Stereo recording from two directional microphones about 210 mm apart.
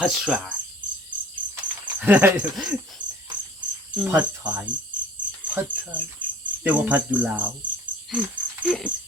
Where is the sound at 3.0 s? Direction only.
60° right (ahead or behind).